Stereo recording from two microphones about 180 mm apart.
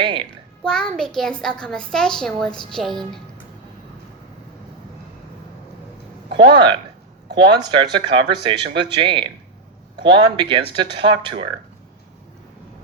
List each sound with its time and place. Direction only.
0.0 s music: 25° right (ahead or behind)
0.6 s a child's voice: 5° left (ahead or behind)
6.3 s speech: 25° right (ahead or behind)